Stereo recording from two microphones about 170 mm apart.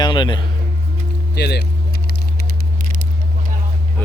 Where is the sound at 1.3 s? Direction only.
75° left (ahead or behind).